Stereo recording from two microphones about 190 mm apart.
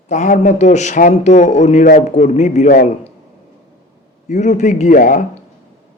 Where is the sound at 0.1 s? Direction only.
40° left (ahead or behind).